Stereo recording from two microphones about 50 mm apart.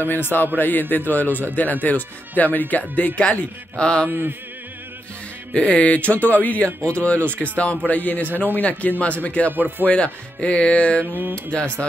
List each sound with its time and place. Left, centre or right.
0.0 s speech: left
3.2 s speech: left
4.1 s chant: right
5.5 s speech: left
9.5 s speech: right
9.8 s speech: left